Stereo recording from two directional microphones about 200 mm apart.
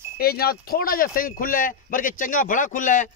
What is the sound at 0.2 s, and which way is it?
Speech, 50° left (ahead or behind).